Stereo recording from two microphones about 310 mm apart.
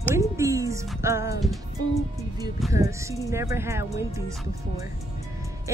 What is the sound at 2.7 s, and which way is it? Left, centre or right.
Speech, centre.